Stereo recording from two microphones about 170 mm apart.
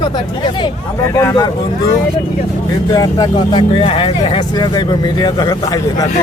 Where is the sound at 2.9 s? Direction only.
20° left (ahead or behind).